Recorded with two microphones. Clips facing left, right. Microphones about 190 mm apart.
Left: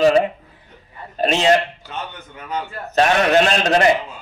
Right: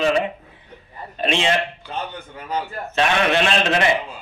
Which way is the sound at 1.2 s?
40° left (ahead or behind).